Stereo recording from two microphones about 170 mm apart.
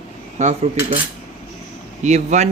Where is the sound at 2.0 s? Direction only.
45° right (ahead or behind).